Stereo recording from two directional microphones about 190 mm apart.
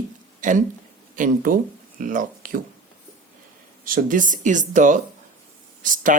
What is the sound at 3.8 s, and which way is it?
Speech, 45° right (ahead or behind).